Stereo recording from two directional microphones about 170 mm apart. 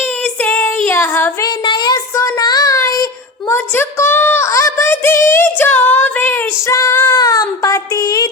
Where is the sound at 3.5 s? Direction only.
15° left (ahead or behind).